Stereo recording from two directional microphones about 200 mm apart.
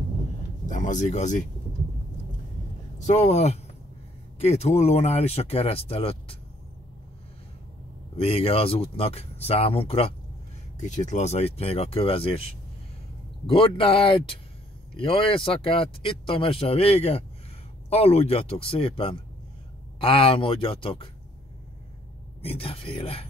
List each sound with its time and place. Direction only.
0.7 s speech: 40° left (ahead or behind)
3.1 s speech: 35° left (ahead or behind)
8.2 s speech: 30° left (ahead or behind)
22.4 s speech: 30° left (ahead or behind)